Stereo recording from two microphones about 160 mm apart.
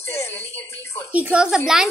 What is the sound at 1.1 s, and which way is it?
Speech, 10° right (ahead or behind).